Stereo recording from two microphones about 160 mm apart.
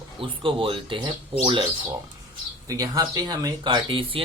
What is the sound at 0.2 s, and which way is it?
Speech, 35° right (ahead or behind).